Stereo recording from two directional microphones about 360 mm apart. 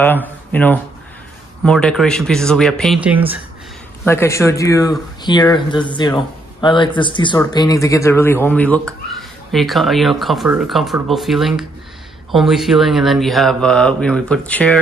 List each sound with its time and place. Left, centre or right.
0.0 s speech: centre
4.0 s speech: centre